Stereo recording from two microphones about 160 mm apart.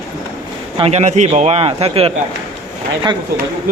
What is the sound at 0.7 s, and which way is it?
A man's voice, 40° right (ahead or behind).